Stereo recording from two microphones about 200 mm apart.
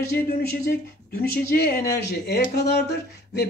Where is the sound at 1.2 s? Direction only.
50° left (ahead or behind).